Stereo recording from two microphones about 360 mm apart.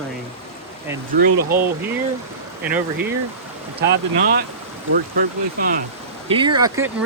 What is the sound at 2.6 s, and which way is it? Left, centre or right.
Speech, centre.